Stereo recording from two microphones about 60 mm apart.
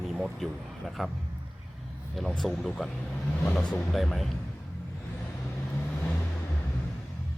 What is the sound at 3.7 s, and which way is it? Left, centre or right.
Speech, centre.